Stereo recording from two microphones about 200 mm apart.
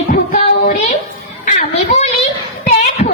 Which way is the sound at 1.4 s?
35° left (ahead or behind).